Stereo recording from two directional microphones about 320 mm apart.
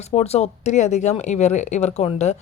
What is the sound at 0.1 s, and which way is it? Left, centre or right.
Speech, centre.